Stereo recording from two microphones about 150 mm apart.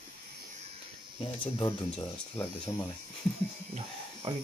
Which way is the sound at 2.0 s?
20° left (ahead or behind).